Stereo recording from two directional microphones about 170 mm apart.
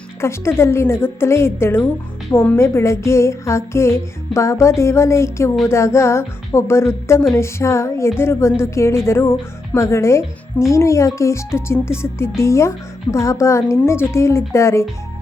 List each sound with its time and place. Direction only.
0.2 s a woman's voice: 15° left (ahead or behind)